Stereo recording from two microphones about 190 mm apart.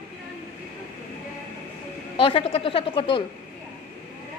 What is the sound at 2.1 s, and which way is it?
A woman's voice, 30° left (ahead or behind).